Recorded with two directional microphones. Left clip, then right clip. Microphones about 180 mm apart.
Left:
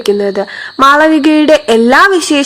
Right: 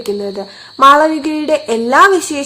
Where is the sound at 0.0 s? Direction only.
30° left (ahead or behind).